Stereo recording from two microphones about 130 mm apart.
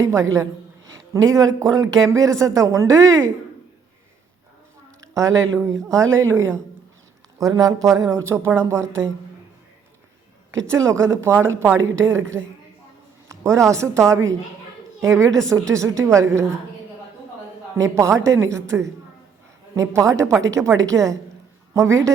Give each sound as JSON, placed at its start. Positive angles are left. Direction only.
{"t": 0.1, "sound": "speech", "side_deg": -20}
{"t": 5.9, "sound": "speech", "side_deg": -25}
{"t": 10.5, "sound": "speech", "side_deg": -25}
{"t": 17.7, "sound": "speech", "side_deg": -20}
{"t": 19.7, "sound": "speech", "side_deg": -25}